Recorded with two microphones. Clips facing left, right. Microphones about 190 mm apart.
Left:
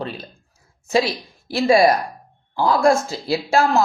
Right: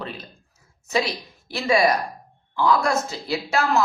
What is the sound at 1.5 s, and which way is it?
A woman's voice, 35° left (ahead or behind).